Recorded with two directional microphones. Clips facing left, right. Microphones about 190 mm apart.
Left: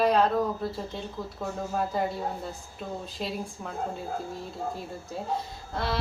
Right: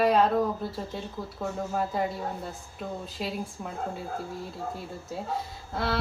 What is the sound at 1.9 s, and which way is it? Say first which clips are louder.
Speech: left 1 dB; centre (ahead or behind).